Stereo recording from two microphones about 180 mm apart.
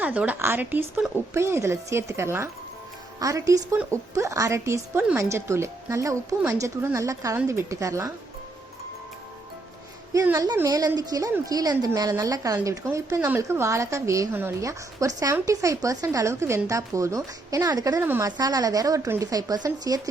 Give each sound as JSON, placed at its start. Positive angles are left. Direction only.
{"t": 0.0, "sound": "a woman's voice", "side_deg": -10}
{"t": 10.1, "sound": "a woman's voice", "side_deg": -20}